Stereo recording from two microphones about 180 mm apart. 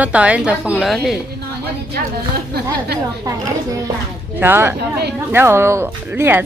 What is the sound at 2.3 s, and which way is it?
Speech, 60° right (ahead or behind).